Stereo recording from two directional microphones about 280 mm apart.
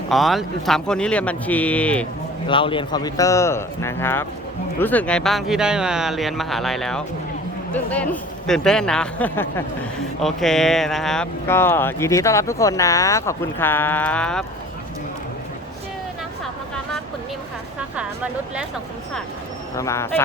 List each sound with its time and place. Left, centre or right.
0.1 s speech: centre
2.5 s speech: centre
17.9 s speech: centre
19.7 s speech: centre